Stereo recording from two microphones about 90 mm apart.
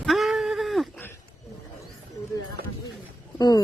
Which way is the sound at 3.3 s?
50° left (ahead or behind).